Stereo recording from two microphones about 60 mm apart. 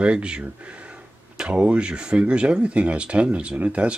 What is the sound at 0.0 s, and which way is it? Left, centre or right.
Speech, centre.